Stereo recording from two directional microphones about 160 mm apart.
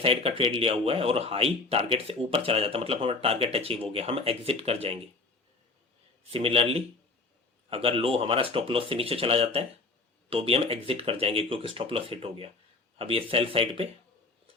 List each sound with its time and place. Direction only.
0.0 s speech: 35° right (ahead or behind)
6.3 s speech: 35° right (ahead or behind)